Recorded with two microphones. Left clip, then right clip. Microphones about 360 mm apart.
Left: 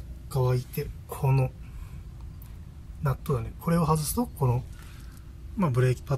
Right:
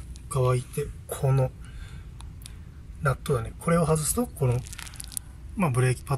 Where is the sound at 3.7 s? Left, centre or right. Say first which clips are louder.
Right 3 dB; right.